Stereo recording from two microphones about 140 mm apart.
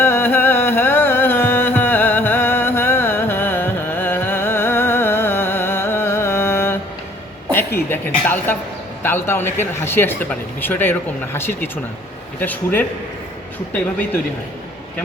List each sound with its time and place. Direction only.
0.0 s music: 15° left (ahead or behind)
7.5 s a sound: 15° left (ahead or behind)
9.0 s speech: 15° left (ahead or behind)